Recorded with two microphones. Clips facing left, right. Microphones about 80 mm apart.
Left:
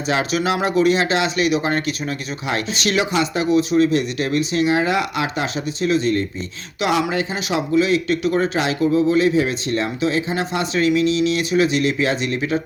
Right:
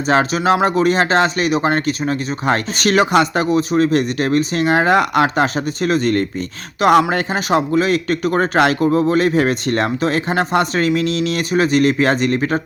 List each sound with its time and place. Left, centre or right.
0.1 s speech: right